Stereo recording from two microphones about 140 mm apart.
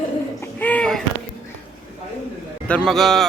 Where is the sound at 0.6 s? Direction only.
10° left (ahead or behind).